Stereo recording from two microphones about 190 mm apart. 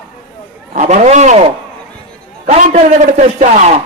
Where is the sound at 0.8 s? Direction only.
40° right (ahead or behind).